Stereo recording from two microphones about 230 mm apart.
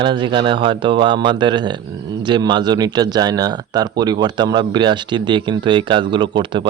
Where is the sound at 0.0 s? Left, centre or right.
Centre.